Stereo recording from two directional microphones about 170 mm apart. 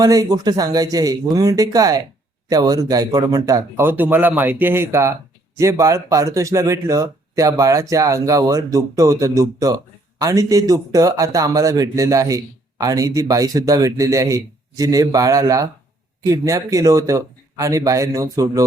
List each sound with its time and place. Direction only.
0.0 s a man's voice: 20° right (ahead or behind)